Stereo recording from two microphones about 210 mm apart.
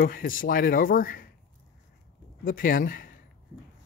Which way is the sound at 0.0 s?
45° left (ahead or behind).